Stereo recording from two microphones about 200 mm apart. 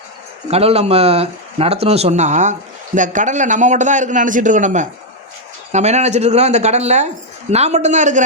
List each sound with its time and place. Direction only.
0.5 s speech: 30° right (ahead or behind)